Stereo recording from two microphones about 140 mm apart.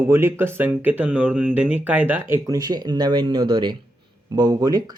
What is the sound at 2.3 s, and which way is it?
Speech, 25° right (ahead or behind).